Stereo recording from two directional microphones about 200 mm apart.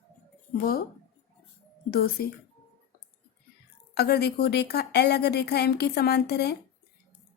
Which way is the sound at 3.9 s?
55° left (ahead or behind).